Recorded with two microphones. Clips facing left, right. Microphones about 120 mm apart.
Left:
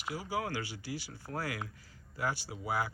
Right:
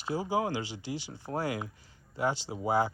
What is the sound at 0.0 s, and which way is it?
Speech, 25° right (ahead or behind).